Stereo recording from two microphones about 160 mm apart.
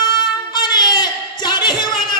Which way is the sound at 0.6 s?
25° left (ahead or behind).